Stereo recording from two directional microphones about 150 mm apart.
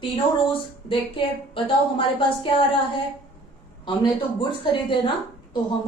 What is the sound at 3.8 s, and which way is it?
A woman's voice, 30° left (ahead or behind).